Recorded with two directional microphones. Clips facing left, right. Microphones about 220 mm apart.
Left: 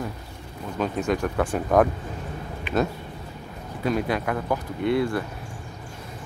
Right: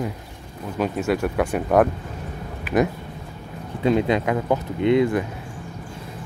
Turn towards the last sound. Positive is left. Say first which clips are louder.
# right 5 dB
turn(degrees=-20)  # may be behind; listen again after turning